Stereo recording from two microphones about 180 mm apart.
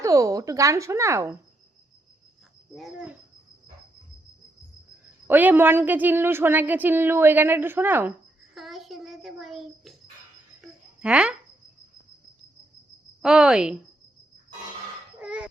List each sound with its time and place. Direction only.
0.0 s a woman's voice: 20° right (ahead or behind)
2.7 s a woman's voice: 5° right (ahead or behind)
5.3 s a woman's voice: 10° right (ahead or behind)
10.6 s a sound: 5° right (ahead or behind)
13.2 s a woman's voice: centre (ahead or behind)
15.2 s a sound: 5° right (ahead or behind)